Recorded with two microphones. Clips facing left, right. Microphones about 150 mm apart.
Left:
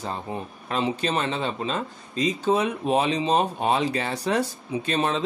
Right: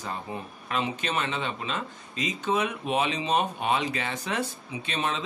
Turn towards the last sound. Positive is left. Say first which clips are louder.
# left 6 dB
turn(degrees=35)  # may be behind; listen again after turning